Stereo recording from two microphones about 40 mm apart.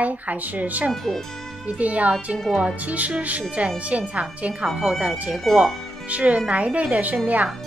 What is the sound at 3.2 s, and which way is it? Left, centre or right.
Speech, right.